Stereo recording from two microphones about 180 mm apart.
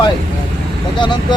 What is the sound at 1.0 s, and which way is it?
Speech, 25° left (ahead or behind).